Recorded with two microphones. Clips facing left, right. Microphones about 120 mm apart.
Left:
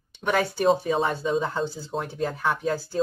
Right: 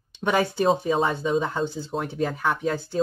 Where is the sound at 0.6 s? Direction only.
Centre (ahead or behind).